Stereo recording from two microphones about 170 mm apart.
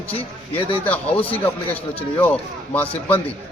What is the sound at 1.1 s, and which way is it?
A man's voice, 10° left (ahead or behind).